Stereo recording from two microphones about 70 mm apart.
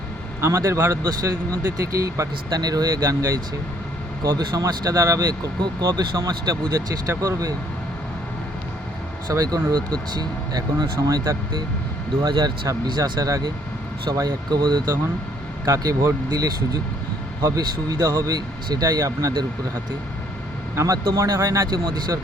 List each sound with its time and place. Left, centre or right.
0.4 s a man's voice: right
1.2 s speech: right
2.6 s speech: right
3.1 s speech: right
5.5 s speech: right
9.3 s speech: right
9.6 s speech: right
14.1 s speech: right
15.6 s speech: right
17.6 s speech: right
20.7 s speech: right
21.3 s a man's voice: right
21.7 s speech: right